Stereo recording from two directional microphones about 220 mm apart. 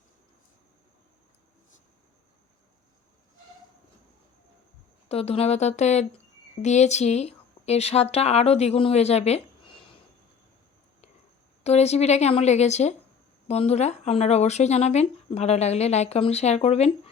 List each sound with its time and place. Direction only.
5.0 s speech: 25° left (ahead or behind)
11.6 s speech: 30° left (ahead or behind)